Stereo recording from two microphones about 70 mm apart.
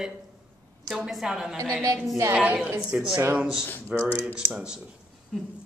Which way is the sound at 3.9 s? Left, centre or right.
Right.